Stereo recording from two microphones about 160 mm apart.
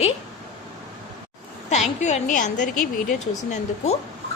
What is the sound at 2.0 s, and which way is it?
A woman's voice, 45° left (ahead or behind).